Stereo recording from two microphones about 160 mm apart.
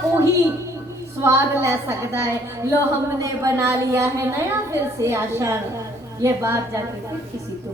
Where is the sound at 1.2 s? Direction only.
15° right (ahead or behind).